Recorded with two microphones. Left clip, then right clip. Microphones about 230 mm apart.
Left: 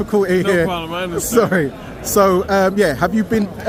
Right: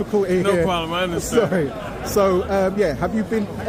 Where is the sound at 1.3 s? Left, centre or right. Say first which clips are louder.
Left 4 dB; left.